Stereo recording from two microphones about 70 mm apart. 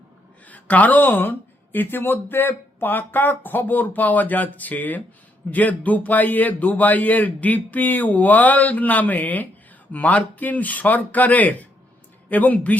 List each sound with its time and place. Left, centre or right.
0.4 s speech: left